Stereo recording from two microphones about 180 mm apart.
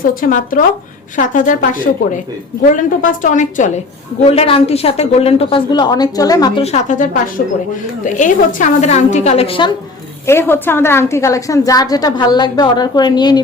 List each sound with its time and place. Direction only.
0.0 s a woman's voice: 50° left (ahead or behind)
2.6 s a woman's voice: 50° left (ahead or behind)
4.3 s a woman's voice: 30° left (ahead or behind)
6.6 s a woman's voice: 40° left (ahead or behind)
10.2 s a woman's voice: 15° left (ahead or behind)